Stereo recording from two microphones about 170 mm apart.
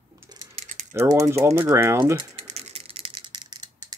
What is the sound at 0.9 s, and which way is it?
Speech, 15° right (ahead or behind).